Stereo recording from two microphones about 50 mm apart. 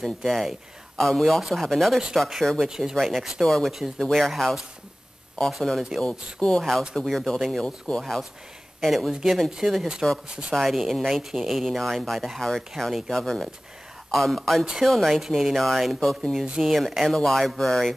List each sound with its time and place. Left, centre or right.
0.0 s speech: centre
3.4 s speech: centre
5.9 s speech: centre
7.6 s speech: centre
8.0 s speech: centre
10.5 s speech: centre